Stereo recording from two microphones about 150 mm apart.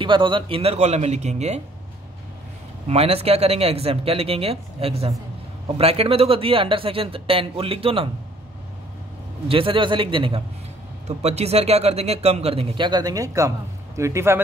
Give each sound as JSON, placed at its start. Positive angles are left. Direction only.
{"t": 0.0, "sound": "speech", "side_deg": -35}
{"t": 2.9, "sound": "speech", "side_deg": -40}
{"t": 9.5, "sound": "speech", "side_deg": -35}